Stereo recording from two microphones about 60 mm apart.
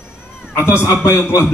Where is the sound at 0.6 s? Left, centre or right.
Left.